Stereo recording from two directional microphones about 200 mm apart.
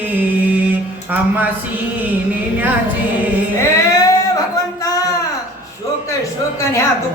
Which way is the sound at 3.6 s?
15° left (ahead or behind).